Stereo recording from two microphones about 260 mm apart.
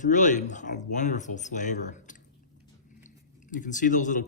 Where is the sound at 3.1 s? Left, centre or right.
Left.